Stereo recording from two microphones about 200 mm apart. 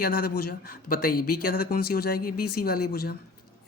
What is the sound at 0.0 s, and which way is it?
Speech, 45° left (ahead or behind).